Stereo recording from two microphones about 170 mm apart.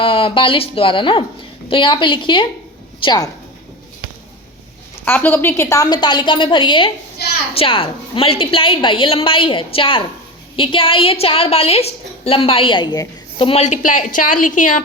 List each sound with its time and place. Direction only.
0.0 s a woman's voice: 30° left (ahead or behind)
5.0 s a woman's voice: 10° left (ahead or behind)
13.5 s speech: 45° left (ahead or behind)